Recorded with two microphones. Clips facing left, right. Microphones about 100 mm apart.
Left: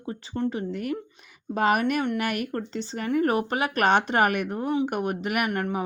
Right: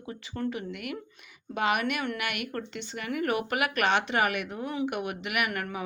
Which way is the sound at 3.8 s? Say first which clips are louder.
Left 6 dB; 45° left (ahead or behind).